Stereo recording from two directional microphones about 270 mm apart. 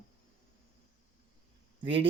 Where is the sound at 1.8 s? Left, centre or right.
Centre.